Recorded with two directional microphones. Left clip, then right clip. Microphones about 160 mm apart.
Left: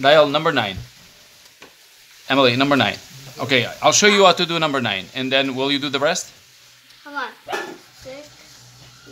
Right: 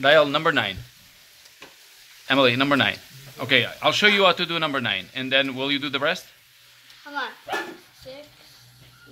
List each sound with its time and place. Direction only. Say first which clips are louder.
0.0 s a man's voice: left 3 dB; 5° right (ahead or behind)
2.2 s a man's voice: left 3 dB; centre (ahead or behind)